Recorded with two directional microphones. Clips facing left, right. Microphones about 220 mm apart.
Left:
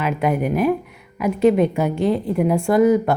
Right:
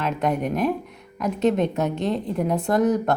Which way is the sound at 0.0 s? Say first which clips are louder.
Left 3 dB; 5° left (ahead or behind).